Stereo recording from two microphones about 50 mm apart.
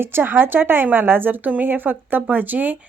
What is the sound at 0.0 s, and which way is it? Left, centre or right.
Speech, right.